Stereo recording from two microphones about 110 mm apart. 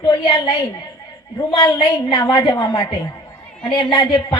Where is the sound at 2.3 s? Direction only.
35° left (ahead or behind).